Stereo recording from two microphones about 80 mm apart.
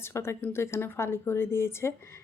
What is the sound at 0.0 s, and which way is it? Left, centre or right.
A woman's voice, left.